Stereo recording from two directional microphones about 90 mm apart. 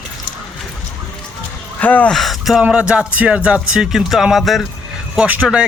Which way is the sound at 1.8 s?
20° left (ahead or behind).